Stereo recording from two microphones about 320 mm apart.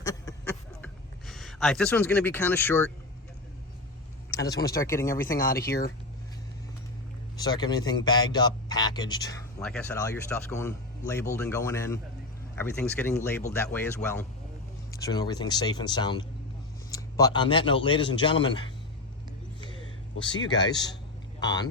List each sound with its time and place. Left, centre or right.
0.0 s a sound: centre
1.3 s speech: centre
4.3 s a man's voice: centre
5.3 s speech: left
7.3 s a man's voice: centre
20.1 s a man's voice: centre